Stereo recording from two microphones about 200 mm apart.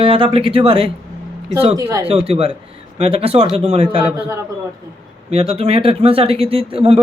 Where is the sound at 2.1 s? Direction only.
30° right (ahead or behind).